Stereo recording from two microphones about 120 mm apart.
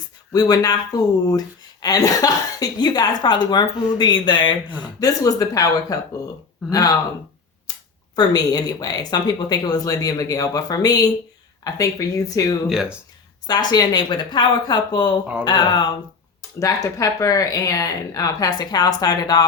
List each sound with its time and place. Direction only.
0.3 s speech: 30° left (ahead or behind)
1.8 s speech: 30° left (ahead or behind)
4.9 s speech: 30° left (ahead or behind)
8.1 s speech: 35° left (ahead or behind)
12.6 s speech: 5° right (ahead or behind)
13.5 s speech: 35° left (ahead or behind)